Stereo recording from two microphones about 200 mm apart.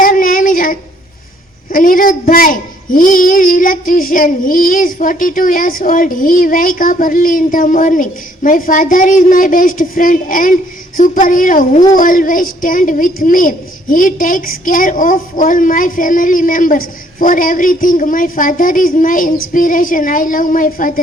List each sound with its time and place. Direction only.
0.0 s child singing: 45° left (ahead or behind)
1.7 s a child's voice: 45° left (ahead or behind)